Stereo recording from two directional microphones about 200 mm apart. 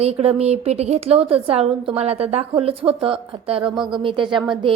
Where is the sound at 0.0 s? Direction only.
30° right (ahead or behind).